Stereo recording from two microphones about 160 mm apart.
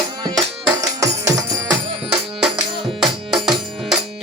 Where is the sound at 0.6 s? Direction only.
20° right (ahead or behind).